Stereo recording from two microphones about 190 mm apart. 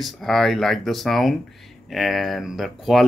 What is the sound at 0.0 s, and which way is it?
Speech, centre (ahead or behind).